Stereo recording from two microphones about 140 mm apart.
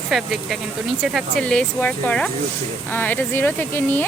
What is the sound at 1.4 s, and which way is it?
Speech, 10° left (ahead or behind).